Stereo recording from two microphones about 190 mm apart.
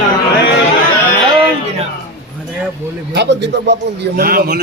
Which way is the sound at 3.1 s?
65° right (ahead or behind).